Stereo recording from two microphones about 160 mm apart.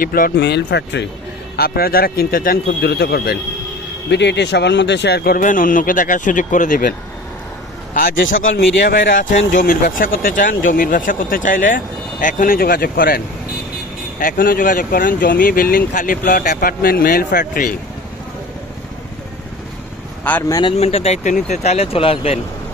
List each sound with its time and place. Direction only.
0.0 s speech: 65° left (ahead or behind); by 1.0 s 90° left
1.6 s speech: 70° left (ahead or behind)
14.2 s speech: 60° left (ahead or behind)
20.4 s speech: 20° left (ahead or behind)
20.7 s speech: 40° left (ahead or behind)